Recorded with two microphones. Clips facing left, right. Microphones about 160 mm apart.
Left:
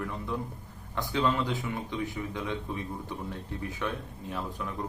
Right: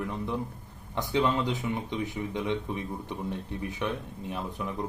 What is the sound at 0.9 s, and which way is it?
Speech, 20° right (ahead or behind).